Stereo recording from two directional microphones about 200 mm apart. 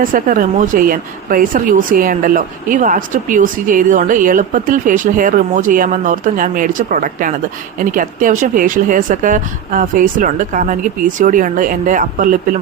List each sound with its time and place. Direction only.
0.0 s speech: 45° right (ahead or behind)